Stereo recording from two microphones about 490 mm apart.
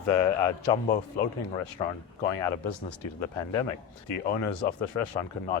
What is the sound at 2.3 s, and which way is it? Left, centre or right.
Speech, left.